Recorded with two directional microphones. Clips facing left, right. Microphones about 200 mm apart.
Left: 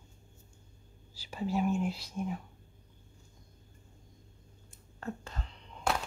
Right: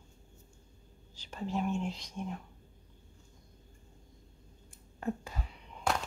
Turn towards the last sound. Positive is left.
turn(degrees=0)  # may be behind; listen again after turning